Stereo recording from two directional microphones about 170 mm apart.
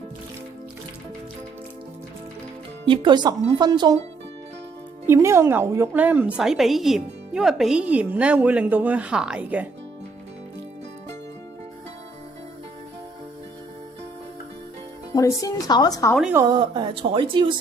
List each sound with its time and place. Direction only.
2.8 s speech: 30° right (ahead or behind)
5.0 s a woman's voice: 15° right (ahead or behind)
15.1 s speech: 20° left (ahead or behind)
16.3 s speech: 20° right (ahead or behind)